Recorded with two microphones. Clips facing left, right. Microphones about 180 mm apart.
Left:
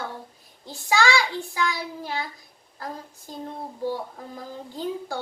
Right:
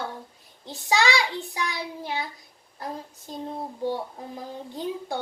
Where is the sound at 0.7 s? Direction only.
20° right (ahead or behind).